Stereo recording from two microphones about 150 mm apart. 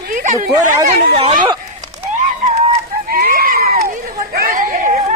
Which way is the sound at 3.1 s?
75° right (ahead or behind).